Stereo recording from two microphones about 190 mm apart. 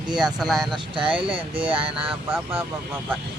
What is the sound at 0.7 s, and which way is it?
Speech, 25° right (ahead or behind).